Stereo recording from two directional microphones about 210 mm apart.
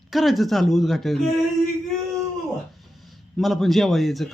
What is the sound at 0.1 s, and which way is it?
Speech, centre (ahead or behind).